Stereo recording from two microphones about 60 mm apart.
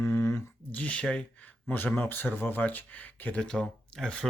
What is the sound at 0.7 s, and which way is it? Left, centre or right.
Speech, left.